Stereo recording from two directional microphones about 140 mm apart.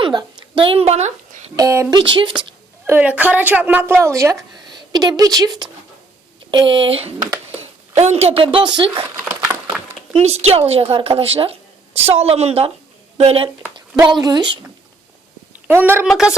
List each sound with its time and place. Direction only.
0.0 s speech: 35° right (ahead or behind); by 1.4 s 55° right (ahead or behind)
1.5 s speech: 20° right (ahead or behind)
2.0 s a woman's voice: 35° right (ahead or behind)
2.8 s a woman's voice: 15° right (ahead or behind); by 9.0 s 35° right (ahead or behind)
10.1 s speech: 50° right (ahead or behind)
14.1 s a woman's voice: 30° right (ahead or behind)
15.6 s a woman's voice: 15° right (ahead or behind)
16.0 s speech: centre (ahead or behind)